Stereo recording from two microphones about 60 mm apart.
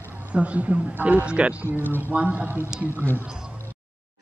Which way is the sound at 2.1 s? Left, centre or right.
Right.